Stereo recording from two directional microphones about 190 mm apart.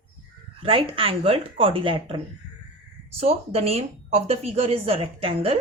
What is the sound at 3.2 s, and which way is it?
Speech, 30° right (ahead or behind).